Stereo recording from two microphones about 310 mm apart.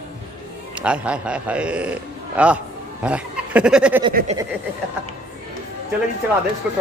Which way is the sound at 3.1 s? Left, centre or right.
Centre.